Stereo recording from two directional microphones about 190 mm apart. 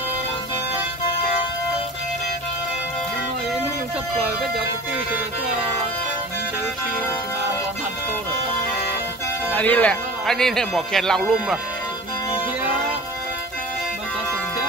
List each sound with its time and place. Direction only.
9.5 s speech: 10° left (ahead or behind)